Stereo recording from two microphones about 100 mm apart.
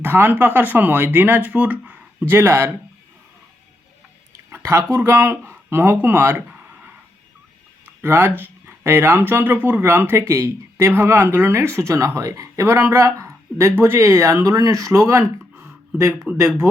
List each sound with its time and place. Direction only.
0.0 s speech: 20° right (ahead or behind)
4.5 s speech: 25° right (ahead or behind)
8.0 s speech: 25° right (ahead or behind)
16.3 s speech: 20° right (ahead or behind)